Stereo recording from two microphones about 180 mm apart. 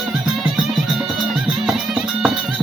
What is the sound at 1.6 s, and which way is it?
Music, centre (ahead or behind).